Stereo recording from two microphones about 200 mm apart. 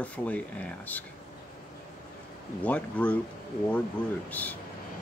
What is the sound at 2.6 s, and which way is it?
Speech, 5° left (ahead or behind).